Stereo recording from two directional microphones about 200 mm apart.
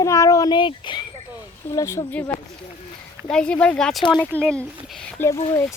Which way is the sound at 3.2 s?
5° left (ahead or behind).